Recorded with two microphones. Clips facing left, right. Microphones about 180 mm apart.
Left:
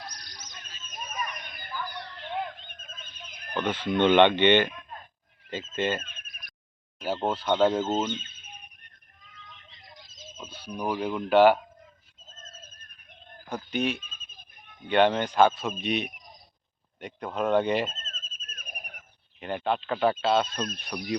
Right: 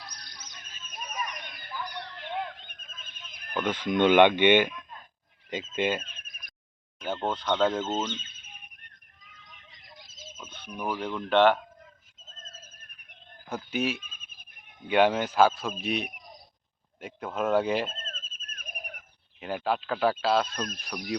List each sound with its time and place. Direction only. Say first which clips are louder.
0.9 s a sound: left 1 dB; 10° right (ahead or behind)
3.5 s speech: even; 10° right (ahead or behind)
5.7 s speech: even; 10° right (ahead or behind)
7.0 s speech: left 2 dB; 10° left (ahead or behind)
10.3 s speech: left 3 dB; 10° left (ahead or behind)
13.5 s speech: left 1 dB; 5° right (ahead or behind)
17.9 s a sound: right 4 dB; 60° right (ahead or behind)
19.4 s speech: left 1 dB; 5° right (ahead or behind)